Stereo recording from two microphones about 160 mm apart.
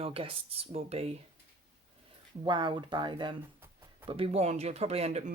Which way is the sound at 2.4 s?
30° right (ahead or behind).